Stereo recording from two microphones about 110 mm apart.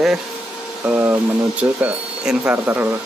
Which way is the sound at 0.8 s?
15° right (ahead or behind).